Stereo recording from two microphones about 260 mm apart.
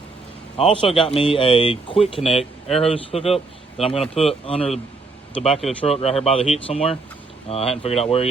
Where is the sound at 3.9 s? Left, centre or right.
Centre.